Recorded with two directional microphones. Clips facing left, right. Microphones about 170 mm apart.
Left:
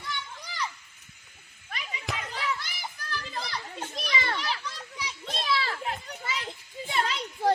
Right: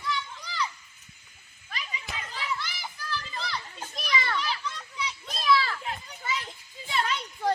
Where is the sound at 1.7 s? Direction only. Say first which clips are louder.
Left 3 dB; 65° left (ahead or behind).